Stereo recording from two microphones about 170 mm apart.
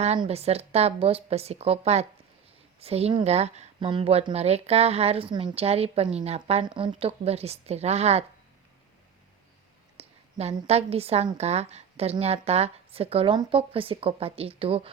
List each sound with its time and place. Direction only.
0.2 s a woman's voice: 35° right (ahead or behind)
10.0 s a woman's voice: 40° right (ahead or behind)